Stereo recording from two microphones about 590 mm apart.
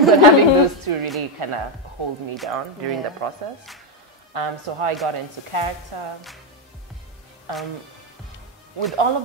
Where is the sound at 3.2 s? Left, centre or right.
Right.